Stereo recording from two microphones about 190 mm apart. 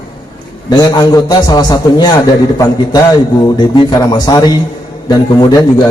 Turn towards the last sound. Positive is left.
turn(degrees=20)  # may be behind; listen again after turning